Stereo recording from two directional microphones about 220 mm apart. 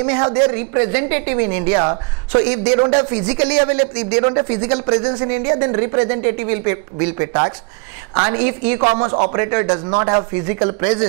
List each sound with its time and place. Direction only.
0.0 s a woman's voice: 15° right (ahead or behind)